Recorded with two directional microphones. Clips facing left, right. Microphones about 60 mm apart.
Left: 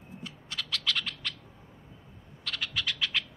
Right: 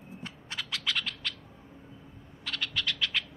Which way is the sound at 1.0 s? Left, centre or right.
Centre.